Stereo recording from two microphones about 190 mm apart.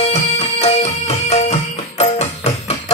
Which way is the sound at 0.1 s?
35° left (ahead or behind).